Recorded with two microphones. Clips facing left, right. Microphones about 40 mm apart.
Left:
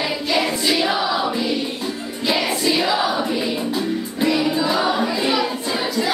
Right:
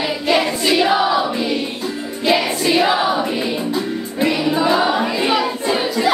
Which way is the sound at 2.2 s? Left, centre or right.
Right.